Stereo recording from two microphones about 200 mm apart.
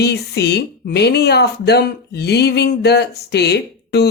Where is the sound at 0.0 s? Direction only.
55° left (ahead or behind).